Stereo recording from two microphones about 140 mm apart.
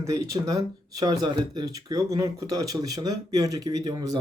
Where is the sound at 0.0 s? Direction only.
20° right (ahead or behind).